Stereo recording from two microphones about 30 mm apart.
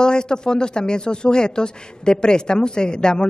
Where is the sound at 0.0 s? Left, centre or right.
Left.